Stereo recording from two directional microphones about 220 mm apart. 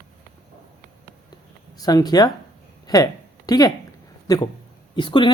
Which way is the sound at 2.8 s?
15° left (ahead or behind).